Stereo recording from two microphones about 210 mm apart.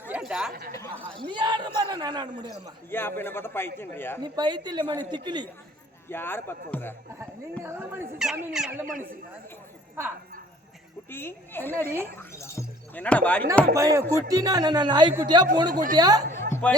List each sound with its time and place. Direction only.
0.1 s chatter: centre (ahead or behind)
1.3 s a man's voice: 20° right (ahead or behind)
2.9 s speech: 10° left (ahead or behind)
4.2 s a man's voice: 20° right (ahead or behind)
6.1 s speech: 10° left (ahead or behind)
7.6 s speech: 10° right (ahead or behind)
11.1 s speech: 10° left (ahead or behind)
13.7 s a man's voice: 15° right (ahead or behind)
15.7 s speech: 40° right (ahead or behind)
16.0 s a man's voice: 20° right (ahead or behind)
16.4 s a sound: 10° left (ahead or behind)